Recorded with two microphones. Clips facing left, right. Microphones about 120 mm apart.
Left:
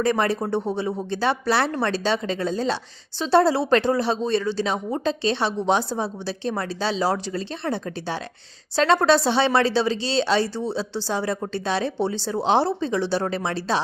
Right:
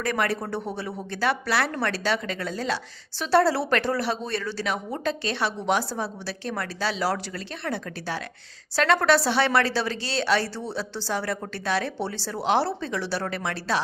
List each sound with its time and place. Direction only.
0.0 s speech: 25° left (ahead or behind)